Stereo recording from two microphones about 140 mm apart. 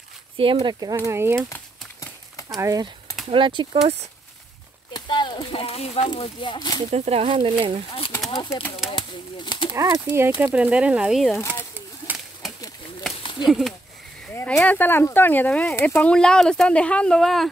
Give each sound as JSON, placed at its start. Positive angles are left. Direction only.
{"t": 0.4, "sound": "speech", "side_deg": -40}
{"t": 0.7, "sound": "speech", "side_deg": -25}
{"t": 1.5, "sound": "horse", "side_deg": 25}
{"t": 2.6, "sound": "speech", "side_deg": -25}
{"t": 3.3, "sound": "speech", "side_deg": -35}
{"t": 4.9, "sound": "speech", "side_deg": 35}
{"t": 6.9, "sound": "speech", "side_deg": -45}
{"t": 8.3, "sound": "speech", "side_deg": 30}
{"t": 10.0, "sound": "speech", "side_deg": -15}
{"t": 12.1, "sound": "a sound", "side_deg": -10}
{"t": 13.2, "sound": "a sound", "side_deg": 35}
{"t": 13.5, "sound": "speech", "side_deg": 0}
{"t": 14.3, "sound": "speech", "side_deg": 15}